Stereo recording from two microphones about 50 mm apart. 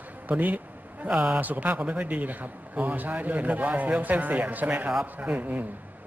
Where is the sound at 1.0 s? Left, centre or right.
Centre.